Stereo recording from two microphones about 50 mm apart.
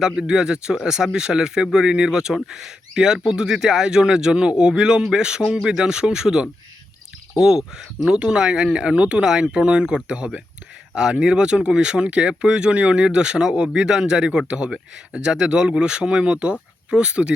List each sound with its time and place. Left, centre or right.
0.0 s speech: centre